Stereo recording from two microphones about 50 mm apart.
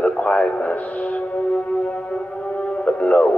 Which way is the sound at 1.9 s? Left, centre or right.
Left.